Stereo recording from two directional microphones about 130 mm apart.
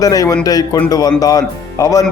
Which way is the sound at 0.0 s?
25° left (ahead or behind).